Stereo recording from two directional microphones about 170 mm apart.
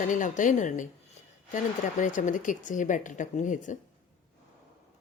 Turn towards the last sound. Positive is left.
turn(degrees=45)  # may be behind; listen again after turning